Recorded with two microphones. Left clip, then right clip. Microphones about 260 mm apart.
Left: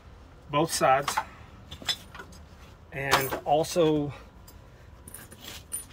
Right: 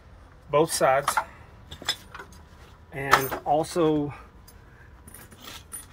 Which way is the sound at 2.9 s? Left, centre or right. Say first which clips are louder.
Right 3 dB; right.